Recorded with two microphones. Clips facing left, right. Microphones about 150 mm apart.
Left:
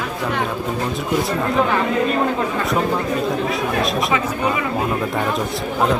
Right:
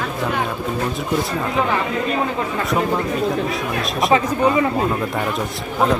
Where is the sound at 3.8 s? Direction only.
Centre (ahead or behind).